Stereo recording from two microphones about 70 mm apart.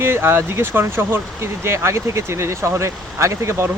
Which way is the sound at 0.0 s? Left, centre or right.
Right.